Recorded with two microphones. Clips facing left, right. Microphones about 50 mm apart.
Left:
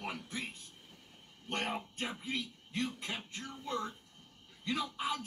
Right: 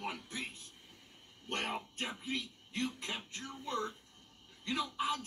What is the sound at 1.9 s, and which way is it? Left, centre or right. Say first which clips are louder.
Speech: left 1 dB; centre.